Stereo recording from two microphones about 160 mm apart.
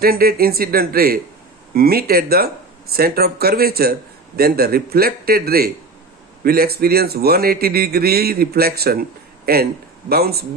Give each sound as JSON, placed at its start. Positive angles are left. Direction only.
{"t": 0.0, "sound": "a man's voice", "side_deg": -70}